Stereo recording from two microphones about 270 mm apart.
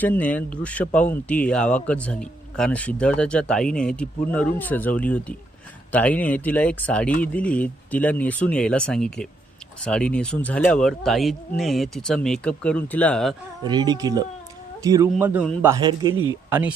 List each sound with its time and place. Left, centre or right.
0.0 s speech: centre
13.7 s a man's voice: centre